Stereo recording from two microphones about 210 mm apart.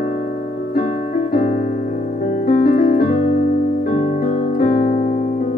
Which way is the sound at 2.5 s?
45° left (ahead or behind).